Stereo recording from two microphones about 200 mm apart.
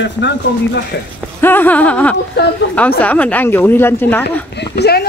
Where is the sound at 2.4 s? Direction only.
55° left (ahead or behind).